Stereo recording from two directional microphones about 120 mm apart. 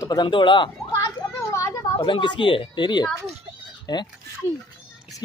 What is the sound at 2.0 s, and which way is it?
A woman's voice, 40° left (ahead or behind).